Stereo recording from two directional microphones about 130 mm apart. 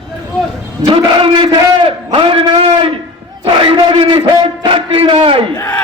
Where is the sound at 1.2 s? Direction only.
40° right (ahead or behind).